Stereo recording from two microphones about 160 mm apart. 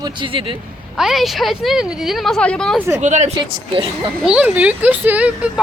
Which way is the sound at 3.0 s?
45° right (ahead or behind).